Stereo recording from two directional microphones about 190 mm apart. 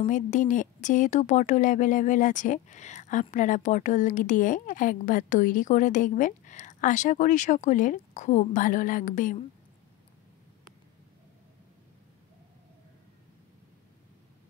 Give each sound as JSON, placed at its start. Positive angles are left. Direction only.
{"t": 0.0, "sound": "speech", "side_deg": 40}